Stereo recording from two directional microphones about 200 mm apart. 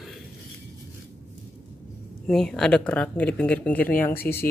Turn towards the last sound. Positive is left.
turn(degrees=10)  # may be behind; listen again after turning